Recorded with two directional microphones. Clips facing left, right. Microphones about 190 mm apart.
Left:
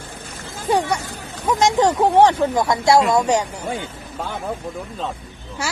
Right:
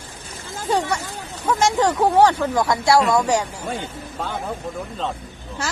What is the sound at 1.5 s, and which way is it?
Speech, 20° left (ahead or behind).